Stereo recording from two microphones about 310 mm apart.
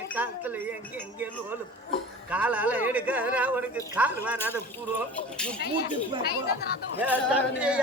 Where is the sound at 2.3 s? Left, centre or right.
Centre.